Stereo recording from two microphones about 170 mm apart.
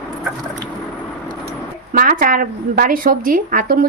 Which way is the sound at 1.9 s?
55° right (ahead or behind).